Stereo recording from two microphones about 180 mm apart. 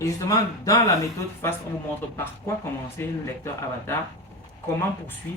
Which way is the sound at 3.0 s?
15° left (ahead or behind).